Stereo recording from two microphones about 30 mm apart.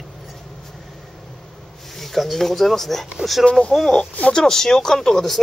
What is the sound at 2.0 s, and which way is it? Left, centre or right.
Speech, centre.